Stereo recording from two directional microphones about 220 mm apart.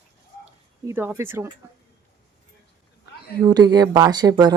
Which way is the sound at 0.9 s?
10° right (ahead or behind).